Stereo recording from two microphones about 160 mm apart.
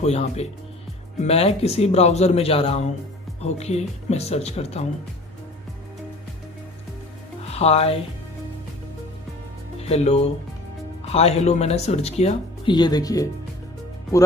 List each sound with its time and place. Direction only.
0.0 s a man's voice: 40° left (ahead or behind)
7.4 s speech: 40° left (ahead or behind)
9.8 s speech: 40° left (ahead or behind)
12.7 s speech: 25° left (ahead or behind)